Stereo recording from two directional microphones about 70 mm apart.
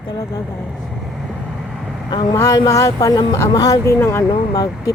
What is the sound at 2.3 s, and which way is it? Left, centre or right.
Speech, left.